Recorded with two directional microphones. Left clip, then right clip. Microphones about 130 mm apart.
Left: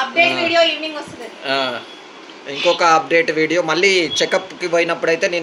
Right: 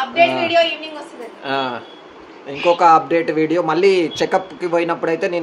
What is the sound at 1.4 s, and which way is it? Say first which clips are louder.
Speech: left 2 dB; 85° right.